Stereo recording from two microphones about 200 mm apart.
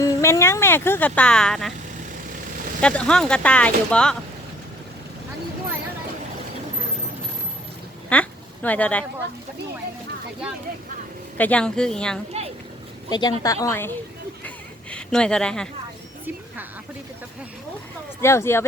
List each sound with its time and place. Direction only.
0.0 s speech: 15° left (ahead or behind)
2.8 s speech: 5° left (ahead or behind)
8.1 s a sound: 5° left (ahead or behind)
11.3 s speech: 5° left (ahead or behind)
13.1 s speech: 20° left (ahead or behind)
14.4 s a sound: 5° left (ahead or behind)
18.2 s speech: 15° left (ahead or behind)